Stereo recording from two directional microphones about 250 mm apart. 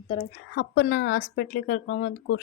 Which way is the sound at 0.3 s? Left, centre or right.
Left.